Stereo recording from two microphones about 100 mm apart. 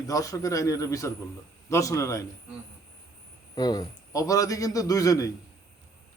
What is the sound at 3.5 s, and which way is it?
A man's voice, 45° left (ahead or behind).